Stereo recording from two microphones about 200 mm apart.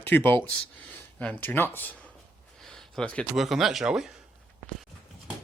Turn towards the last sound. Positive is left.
turn(degrees=-5)  # may be behind; listen again after turning